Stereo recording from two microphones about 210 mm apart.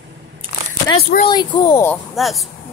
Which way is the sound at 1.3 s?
20° left (ahead or behind).